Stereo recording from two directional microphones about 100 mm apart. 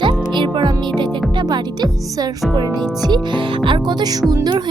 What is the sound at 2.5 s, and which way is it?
Music, 45° right (ahead or behind).